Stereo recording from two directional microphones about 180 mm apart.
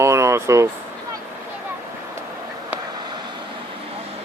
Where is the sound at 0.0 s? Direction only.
15° right (ahead or behind).